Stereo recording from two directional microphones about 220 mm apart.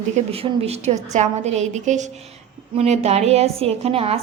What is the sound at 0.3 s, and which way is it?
A woman's voice, 25° right (ahead or behind).